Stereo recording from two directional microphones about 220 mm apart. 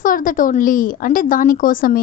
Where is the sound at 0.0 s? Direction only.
40° left (ahead or behind).